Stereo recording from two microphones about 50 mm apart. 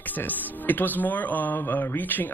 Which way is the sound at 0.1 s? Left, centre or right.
Left.